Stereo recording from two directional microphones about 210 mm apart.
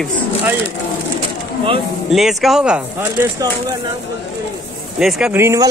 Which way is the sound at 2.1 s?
Centre (ahead or behind).